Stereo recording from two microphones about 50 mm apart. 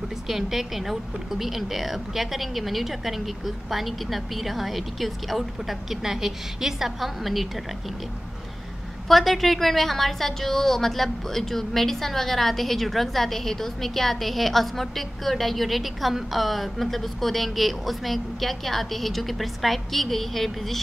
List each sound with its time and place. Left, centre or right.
0.3 s a woman's voice: centre
9.0 s a woman's voice: centre